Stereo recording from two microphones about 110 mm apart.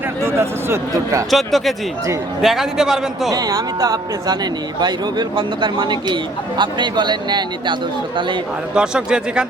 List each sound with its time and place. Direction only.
0.3 s a man's voice: 25° right (ahead or behind)
1.3 s a man's voice: centre (ahead or behind)
3.2 s a man's voice: 35° right (ahead or behind)
8.7 s a man's voice: 10° right (ahead or behind)